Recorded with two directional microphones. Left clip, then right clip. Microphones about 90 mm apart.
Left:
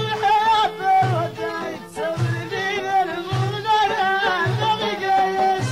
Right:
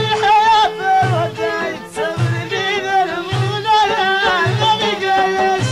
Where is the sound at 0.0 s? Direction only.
15° left (ahead or behind).